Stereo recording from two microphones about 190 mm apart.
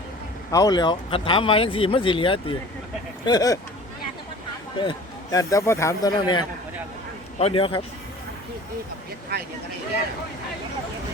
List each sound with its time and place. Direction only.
0.5 s speech: 20° left (ahead or behind)
4.8 s speech: 20° left (ahead or behind)